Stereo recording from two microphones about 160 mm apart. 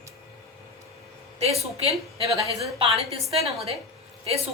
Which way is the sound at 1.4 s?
40° right (ahead or behind).